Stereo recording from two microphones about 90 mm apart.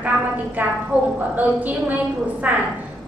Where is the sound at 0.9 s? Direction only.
35° left (ahead or behind).